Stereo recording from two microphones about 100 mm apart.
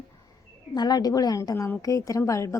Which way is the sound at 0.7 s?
45° left (ahead or behind).